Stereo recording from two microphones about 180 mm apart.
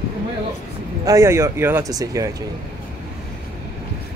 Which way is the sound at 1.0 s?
15° right (ahead or behind).